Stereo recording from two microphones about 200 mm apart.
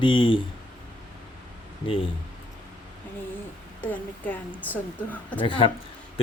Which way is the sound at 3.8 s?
10° left (ahead or behind).